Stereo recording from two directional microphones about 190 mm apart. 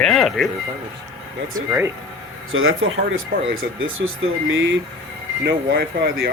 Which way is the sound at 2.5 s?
90° right.